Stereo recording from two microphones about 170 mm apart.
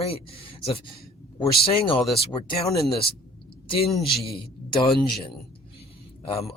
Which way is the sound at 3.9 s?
Centre (ahead or behind).